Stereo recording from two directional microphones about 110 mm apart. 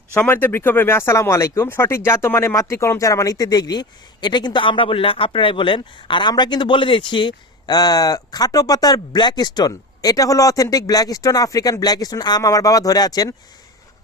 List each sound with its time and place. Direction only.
0.1 s speech: 20° left (ahead or behind); by 13.3 s 35° left (ahead or behind)